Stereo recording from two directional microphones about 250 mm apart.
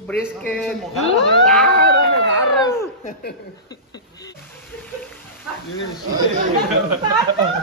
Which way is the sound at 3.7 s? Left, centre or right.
Centre.